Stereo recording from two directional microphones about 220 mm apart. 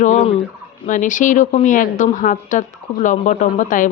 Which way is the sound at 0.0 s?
35° left (ahead or behind).